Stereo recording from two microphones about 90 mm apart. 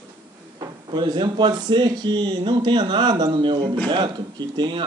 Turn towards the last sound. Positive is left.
turn(degrees=-60)  # may be behind; listen again after turning